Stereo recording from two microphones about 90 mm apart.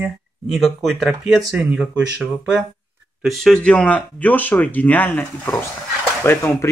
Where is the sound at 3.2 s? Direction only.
Centre (ahead or behind); by 5.6 s 20° left (ahead or behind).